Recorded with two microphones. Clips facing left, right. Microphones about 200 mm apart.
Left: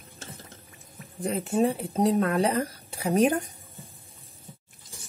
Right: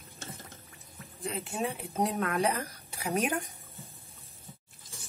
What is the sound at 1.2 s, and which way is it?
Speech, 45° left (ahead or behind).